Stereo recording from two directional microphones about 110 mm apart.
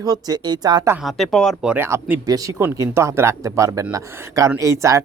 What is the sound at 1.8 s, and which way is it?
A woman's voice, 20° right (ahead or behind).